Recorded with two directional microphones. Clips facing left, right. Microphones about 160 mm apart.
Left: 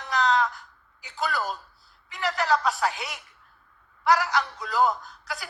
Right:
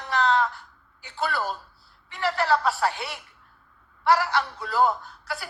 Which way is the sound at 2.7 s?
35° right (ahead or behind).